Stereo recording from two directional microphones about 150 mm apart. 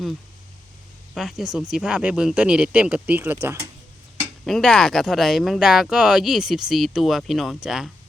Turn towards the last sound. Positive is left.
turn(degrees=-5)  # may be behind; listen again after turning